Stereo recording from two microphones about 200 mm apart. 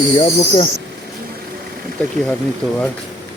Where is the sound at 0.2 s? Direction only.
25° left (ahead or behind).